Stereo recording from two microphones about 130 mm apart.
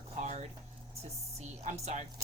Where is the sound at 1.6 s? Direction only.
60° right (ahead or behind).